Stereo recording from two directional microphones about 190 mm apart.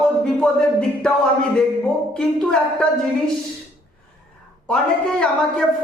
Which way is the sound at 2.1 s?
5° left (ahead or behind).